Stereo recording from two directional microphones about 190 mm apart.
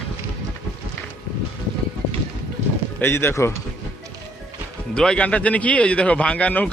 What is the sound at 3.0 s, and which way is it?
Speech, 10° left (ahead or behind).